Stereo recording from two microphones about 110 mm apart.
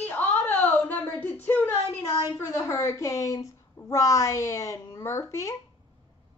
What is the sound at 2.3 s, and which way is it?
A woman's voice, 25° left (ahead or behind).